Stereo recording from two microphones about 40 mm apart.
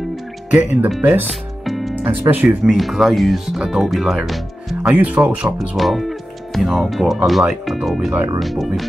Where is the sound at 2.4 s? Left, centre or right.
Right.